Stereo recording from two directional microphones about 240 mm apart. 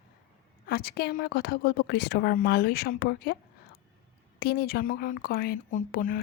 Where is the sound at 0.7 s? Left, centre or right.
Left.